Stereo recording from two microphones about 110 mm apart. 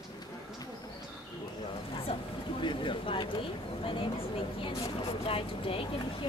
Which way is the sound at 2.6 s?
50° left (ahead or behind).